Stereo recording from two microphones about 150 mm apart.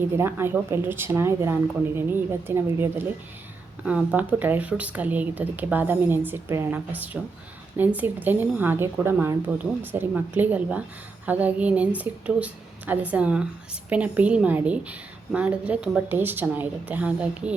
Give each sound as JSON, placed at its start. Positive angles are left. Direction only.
{"t": 0.2, "sound": "a woman's voice", "side_deg": -15}